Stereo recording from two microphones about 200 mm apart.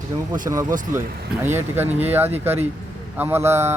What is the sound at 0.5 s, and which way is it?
Speech, 20° right (ahead or behind).